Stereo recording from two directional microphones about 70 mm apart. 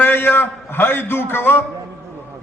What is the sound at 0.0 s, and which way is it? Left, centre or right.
A man's voice, left.